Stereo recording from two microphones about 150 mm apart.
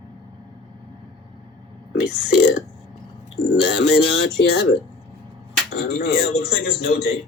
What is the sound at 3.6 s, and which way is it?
Speech, 90° left.